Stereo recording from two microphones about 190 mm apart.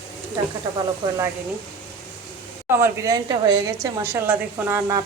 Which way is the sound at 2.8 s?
15° right (ahead or behind).